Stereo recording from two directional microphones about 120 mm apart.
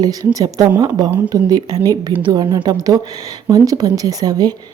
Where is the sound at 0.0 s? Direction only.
30° right (ahead or behind).